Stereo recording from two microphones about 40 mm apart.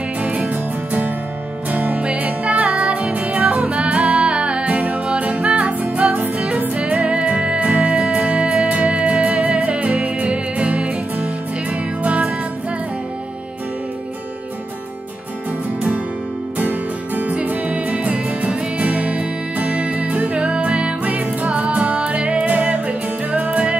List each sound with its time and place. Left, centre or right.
0.2 s music: right
16.5 s music: right
21.0 s music: right